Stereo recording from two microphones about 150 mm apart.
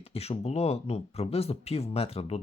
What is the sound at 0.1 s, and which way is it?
Speech, 45° left (ahead or behind).